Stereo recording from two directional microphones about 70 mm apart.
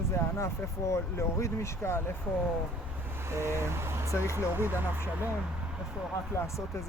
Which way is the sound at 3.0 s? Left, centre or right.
Right.